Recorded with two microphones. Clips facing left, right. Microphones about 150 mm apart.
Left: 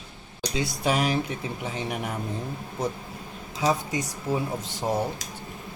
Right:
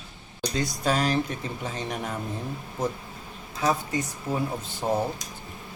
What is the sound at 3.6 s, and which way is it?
Speech, 15° left (ahead or behind).